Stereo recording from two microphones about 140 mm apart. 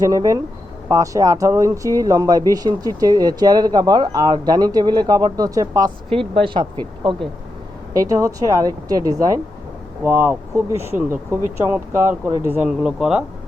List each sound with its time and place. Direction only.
0.0 s speech: 25° right (ahead or behind)
6.1 s speech: 40° right (ahead or behind)
7.9 s speech: 25° right (ahead or behind)
12.6 s speech: 5° right (ahead or behind)